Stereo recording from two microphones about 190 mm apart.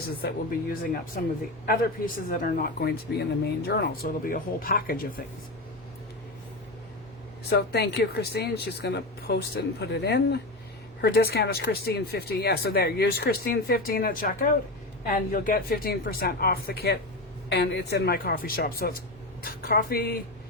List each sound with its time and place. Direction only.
0.2 s speech: 50° left (ahead or behind)
7.5 s speech: 60° left (ahead or behind)